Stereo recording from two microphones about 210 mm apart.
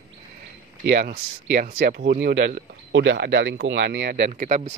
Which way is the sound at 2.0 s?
45° right (ahead or behind).